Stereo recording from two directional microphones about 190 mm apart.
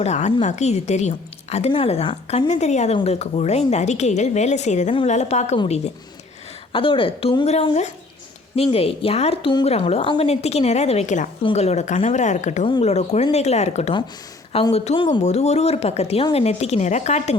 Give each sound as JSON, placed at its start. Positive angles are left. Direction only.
{"t": 0.0, "sound": "a woman's voice", "side_deg": 35}